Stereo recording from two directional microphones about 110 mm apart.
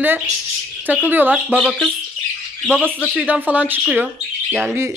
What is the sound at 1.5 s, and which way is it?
Speech, 5° left (ahead or behind).